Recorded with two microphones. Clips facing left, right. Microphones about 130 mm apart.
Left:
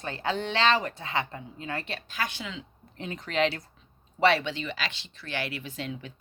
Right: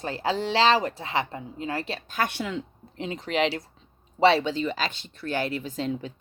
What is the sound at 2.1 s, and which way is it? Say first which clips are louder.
Speech: right 8 dB; 55° right (ahead or behind).